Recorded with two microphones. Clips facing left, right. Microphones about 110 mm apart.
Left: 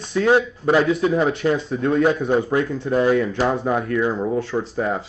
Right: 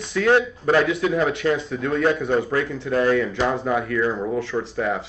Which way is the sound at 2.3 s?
5° left (ahead or behind).